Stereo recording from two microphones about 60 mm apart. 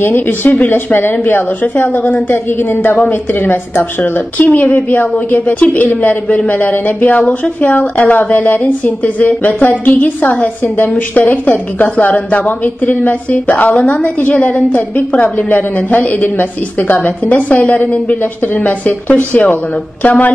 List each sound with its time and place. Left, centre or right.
0.0 s a woman's voice: left